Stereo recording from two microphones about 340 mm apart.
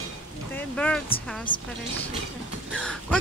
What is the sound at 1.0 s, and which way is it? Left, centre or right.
Speech, centre.